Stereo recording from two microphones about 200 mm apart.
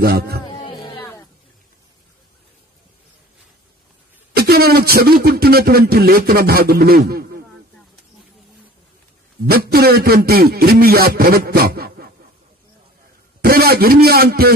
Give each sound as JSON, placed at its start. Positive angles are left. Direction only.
{"t": 0.0, "sound": "speech", "side_deg": -50}
{"t": 4.4, "sound": "speech", "side_deg": -50}
{"t": 9.5, "sound": "speech", "side_deg": -50}
{"t": 13.4, "sound": "a man's voice", "side_deg": -50}